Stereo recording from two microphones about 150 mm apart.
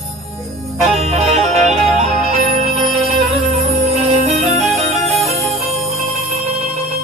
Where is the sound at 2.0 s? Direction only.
45° right (ahead or behind).